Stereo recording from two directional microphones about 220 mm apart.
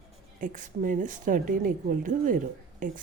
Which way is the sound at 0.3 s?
35° right (ahead or behind).